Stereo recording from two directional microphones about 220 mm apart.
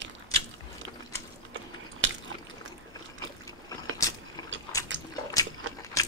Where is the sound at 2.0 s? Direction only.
60° right (ahead or behind).